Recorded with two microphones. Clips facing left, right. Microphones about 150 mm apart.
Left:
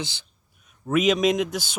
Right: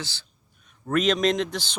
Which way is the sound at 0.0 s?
15° left (ahead or behind).